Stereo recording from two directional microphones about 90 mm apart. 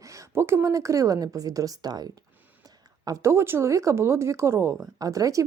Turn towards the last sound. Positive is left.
turn(degrees=-40)  # may be behind; listen again after turning